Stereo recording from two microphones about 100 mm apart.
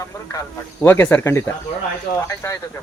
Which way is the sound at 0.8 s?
20° left (ahead or behind).